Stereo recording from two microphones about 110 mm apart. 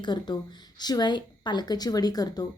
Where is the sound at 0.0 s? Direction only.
40° left (ahead or behind).